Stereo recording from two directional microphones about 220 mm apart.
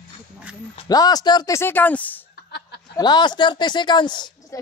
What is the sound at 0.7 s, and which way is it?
Speech, 15° left (ahead or behind).